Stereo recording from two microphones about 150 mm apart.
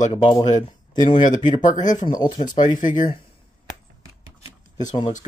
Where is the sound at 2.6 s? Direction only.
60° left (ahead or behind).